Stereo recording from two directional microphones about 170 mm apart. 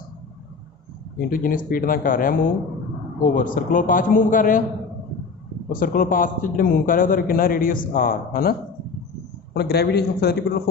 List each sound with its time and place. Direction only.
1.2 s a man's voice: 55° left (ahead or behind)
5.7 s a man's voice: 55° left (ahead or behind)
9.6 s a man's voice: 70° left (ahead or behind)